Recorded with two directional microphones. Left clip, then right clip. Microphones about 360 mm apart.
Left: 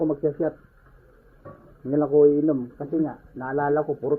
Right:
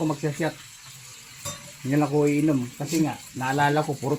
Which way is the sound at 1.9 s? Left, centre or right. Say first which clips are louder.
Left 3 dB; right.